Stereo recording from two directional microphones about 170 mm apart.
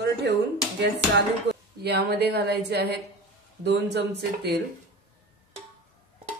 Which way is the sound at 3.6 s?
90° right.